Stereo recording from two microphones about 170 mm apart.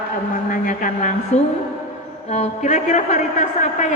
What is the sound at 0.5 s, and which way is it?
A man's voice, 50° left (ahead or behind).